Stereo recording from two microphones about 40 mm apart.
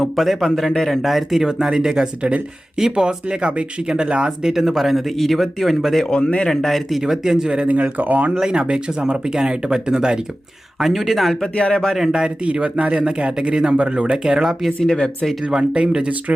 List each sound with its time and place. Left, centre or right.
0.0 s speech: centre
1.0 s speech: centre
1.5 s speech: centre
4.5 s speech: centre
6.1 s speech: left; by 7.0 s centre
7.0 s speech: centre
7.7 s speech: right
8.4 s speech: right
10.8 s speech: centre
11.7 s speech: centre
12.5 s speech: right
14.8 s speech: left
15.4 s speech: right